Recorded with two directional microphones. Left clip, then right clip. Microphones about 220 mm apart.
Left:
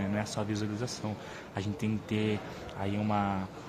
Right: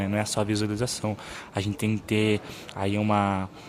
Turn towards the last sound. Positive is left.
turn(degrees=-50)  # may be behind; listen again after turning